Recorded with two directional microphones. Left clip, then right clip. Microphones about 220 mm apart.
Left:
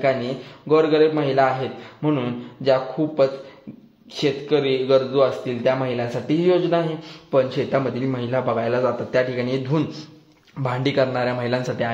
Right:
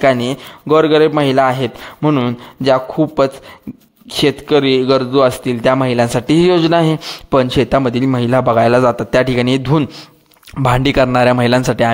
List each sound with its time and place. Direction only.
0.7 s a man's voice: 50° right (ahead or behind)